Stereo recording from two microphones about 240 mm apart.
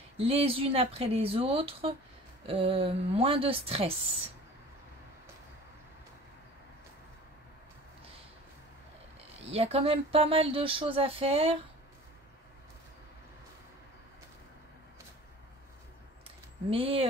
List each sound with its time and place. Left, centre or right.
0.2 s speech: right
9.5 s speech: right
16.3 s a sound: right